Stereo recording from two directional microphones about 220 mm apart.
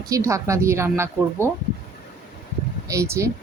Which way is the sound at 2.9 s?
15° right (ahead or behind).